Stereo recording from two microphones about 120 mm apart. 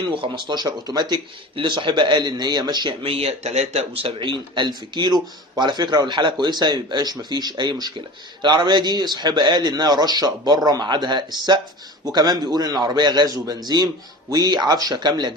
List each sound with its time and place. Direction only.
0.2 s speech: 40° right (ahead or behind)